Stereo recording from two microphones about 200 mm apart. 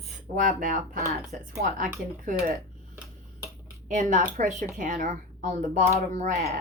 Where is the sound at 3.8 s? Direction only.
40° right (ahead or behind).